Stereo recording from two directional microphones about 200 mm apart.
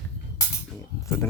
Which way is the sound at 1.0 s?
10° left (ahead or behind).